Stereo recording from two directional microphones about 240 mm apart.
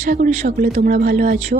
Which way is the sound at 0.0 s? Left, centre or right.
Right.